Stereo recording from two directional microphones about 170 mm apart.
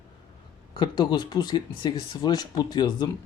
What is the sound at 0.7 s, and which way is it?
Speech, 25° left (ahead or behind).